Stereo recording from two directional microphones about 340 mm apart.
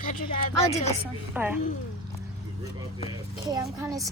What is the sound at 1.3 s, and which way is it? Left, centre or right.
Speech, centre.